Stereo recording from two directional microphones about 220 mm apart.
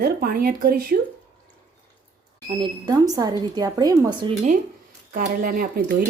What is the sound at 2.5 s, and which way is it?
A woman's voice, 20° right (ahead or behind).